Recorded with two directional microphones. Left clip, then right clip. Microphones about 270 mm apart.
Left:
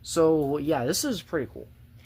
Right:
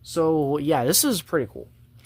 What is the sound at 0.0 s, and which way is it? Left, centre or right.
Speech, centre.